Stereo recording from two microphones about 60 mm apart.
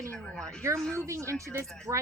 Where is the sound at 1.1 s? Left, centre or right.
Right.